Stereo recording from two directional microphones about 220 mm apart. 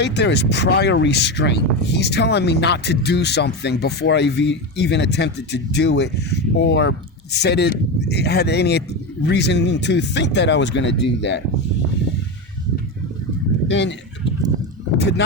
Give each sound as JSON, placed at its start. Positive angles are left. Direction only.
{"t": 0.0, "sound": "speech", "side_deg": 50}
{"t": 13.7, "sound": "speech", "side_deg": 55}
{"t": 14.9, "sound": "a sound", "side_deg": 50}